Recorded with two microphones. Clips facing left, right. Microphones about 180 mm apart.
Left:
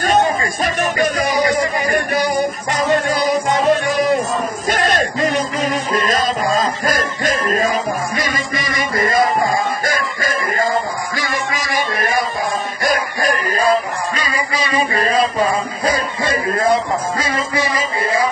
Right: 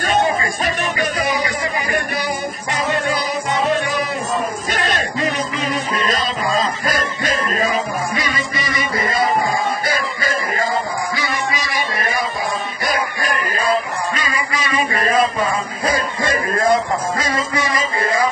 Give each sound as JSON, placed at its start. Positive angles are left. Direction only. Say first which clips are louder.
{"t": 0.0, "sound": "music", "louder": "left 2 dB", "side_deg": 45}
{"t": 12.8, "sound": "music", "louder": "left 4 dB", "side_deg": 40}
{"t": 15.9, "sound": "music", "louder": "even", "side_deg": 20}